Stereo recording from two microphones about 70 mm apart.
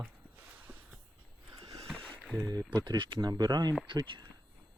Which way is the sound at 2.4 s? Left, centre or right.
Right.